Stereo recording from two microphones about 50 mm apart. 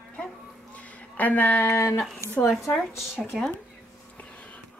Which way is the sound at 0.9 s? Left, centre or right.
Left.